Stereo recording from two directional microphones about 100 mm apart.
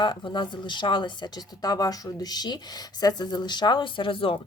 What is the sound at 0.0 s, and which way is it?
Speech, 50° left (ahead or behind).